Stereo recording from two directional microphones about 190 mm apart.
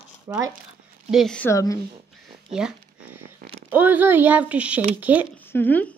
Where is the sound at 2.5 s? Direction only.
5° right (ahead or behind).